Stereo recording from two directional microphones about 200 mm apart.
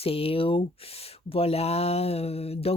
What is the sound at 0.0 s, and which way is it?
Speech, 30° left (ahead or behind).